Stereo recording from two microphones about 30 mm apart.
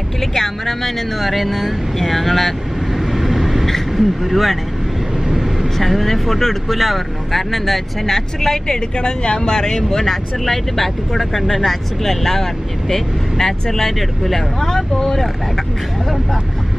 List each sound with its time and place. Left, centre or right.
0.2 s speech: centre
1.3 s speech: centre
3.1 s vehicle: centre
3.9 s speech: centre
5.8 s speech: centre
8.1 s speech: centre
8.9 s speech: left
13.9 s speech: centre
14.6 s speech: centre